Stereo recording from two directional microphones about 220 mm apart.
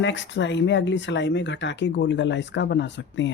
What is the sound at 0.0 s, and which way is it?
Speech, 55° left (ahead or behind).